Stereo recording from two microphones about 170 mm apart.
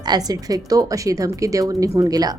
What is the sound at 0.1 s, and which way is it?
A woman's voice, 20° right (ahead or behind).